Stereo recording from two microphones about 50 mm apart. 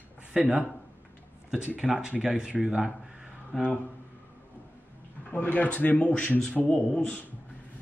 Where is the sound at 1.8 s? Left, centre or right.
Centre.